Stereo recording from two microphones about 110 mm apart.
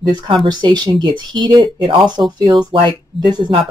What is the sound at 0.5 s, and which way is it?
Speech, 45° right (ahead or behind).